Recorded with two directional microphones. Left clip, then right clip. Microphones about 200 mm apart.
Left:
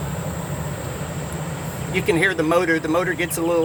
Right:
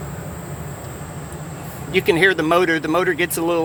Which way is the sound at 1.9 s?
45° right (ahead or behind).